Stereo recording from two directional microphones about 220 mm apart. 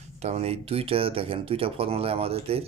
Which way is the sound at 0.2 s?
30° right (ahead or behind).